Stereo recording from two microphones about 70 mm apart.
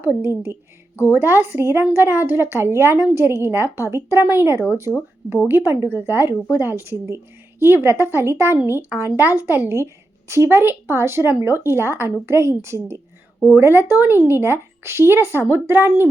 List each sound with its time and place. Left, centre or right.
0.0 s a woman's voice: right
9.7 s a woman's voice: right